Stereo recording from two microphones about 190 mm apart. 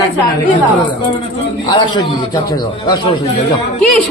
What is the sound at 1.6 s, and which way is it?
A man's voice, 20° left (ahead or behind).